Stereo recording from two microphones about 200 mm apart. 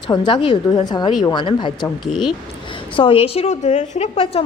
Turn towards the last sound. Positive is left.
turn(degrees=30)  # may be behind; listen again after turning